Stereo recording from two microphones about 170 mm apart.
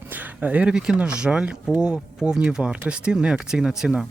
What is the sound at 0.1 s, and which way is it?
Speech, 10° right (ahead or behind).